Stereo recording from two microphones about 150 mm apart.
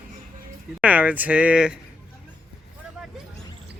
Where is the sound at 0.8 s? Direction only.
10° right (ahead or behind).